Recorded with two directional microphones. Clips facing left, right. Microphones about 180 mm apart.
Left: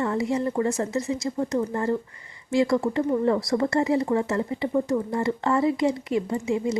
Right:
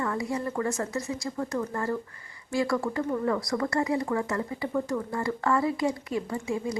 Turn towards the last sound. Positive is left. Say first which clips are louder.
# left 5 dB
turn(degrees=20)  # may be behind; listen again after turning